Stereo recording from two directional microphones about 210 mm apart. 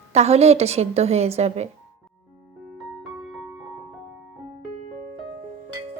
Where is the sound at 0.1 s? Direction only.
30° right (ahead or behind).